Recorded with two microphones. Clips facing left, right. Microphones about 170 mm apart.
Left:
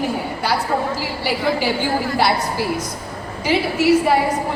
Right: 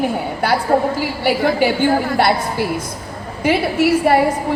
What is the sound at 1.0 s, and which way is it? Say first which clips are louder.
Speech: right 5 dB; 55° right (ahead or behind).